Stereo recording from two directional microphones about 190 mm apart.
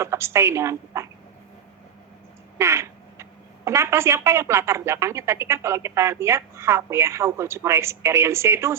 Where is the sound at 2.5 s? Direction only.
15° right (ahead or behind).